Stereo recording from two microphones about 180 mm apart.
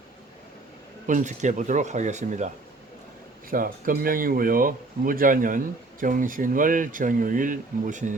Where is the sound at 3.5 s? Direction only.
50° right (ahead or behind).